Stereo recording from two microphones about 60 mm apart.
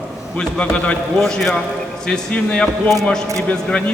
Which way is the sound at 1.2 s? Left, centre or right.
Centre.